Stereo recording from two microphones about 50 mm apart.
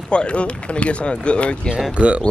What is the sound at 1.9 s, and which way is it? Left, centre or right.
Speech, right.